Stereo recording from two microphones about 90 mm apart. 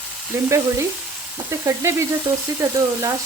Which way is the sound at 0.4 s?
35° right (ahead or behind).